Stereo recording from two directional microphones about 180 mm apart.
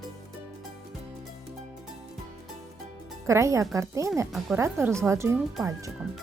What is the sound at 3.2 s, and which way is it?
Speech, 15° right (ahead or behind).